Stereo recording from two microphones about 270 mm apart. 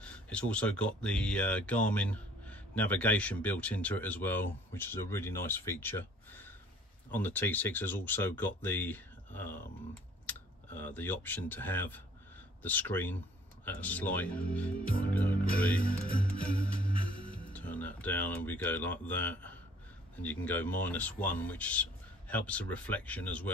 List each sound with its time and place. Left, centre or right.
0.0 s speech: centre
15.3 s music: left
17.5 s speech: centre